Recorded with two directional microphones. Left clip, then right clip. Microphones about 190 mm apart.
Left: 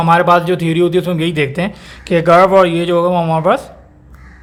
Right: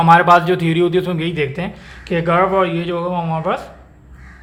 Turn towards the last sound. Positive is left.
turn(degrees=35)  # may be behind; listen again after turning